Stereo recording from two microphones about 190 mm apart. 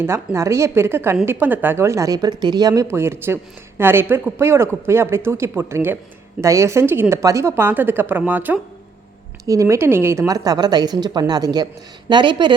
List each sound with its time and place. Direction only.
0.0 s a woman's voice: 15° right (ahead or behind)